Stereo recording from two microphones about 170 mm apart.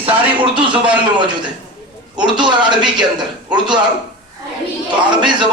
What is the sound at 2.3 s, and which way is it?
Speech, 25° right (ahead or behind).